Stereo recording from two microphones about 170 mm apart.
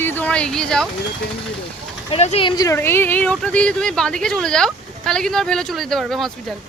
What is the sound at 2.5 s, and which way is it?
Speech, 20° left (ahead or behind).